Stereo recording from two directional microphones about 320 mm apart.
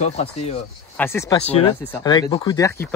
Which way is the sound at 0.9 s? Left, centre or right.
Centre.